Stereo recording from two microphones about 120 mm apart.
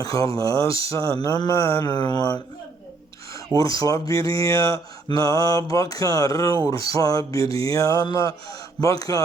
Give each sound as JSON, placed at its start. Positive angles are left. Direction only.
{"t": 0.0, "sound": "mantra", "side_deg": 30}
{"t": 1.9, "sound": "music", "side_deg": 35}
{"t": 3.6, "sound": "music", "side_deg": 30}
{"t": 4.4, "sound": "mantra", "side_deg": 25}
{"t": 6.7, "sound": "music", "side_deg": 30}
{"t": 7.6, "sound": "mantra", "side_deg": 30}